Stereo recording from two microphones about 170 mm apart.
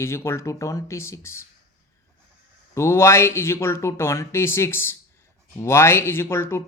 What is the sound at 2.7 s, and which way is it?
Speech, 15° left (ahead or behind).